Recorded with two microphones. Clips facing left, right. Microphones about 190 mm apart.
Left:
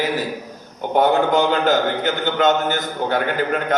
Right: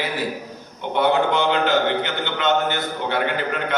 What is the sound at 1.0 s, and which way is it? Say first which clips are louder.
A man's voice: left 3 dB; 40° left (ahead or behind).